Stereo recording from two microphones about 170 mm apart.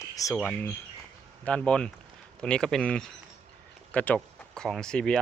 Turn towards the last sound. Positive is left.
turn(degrees=5)  # may be behind; listen again after turning